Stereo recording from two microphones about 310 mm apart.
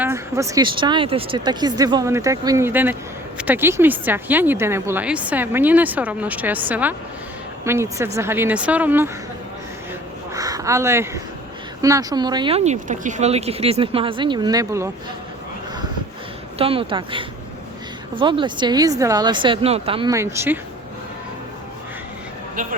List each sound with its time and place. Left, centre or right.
0.0 s speech: centre
10.3 s speech: centre
16.6 s speech: centre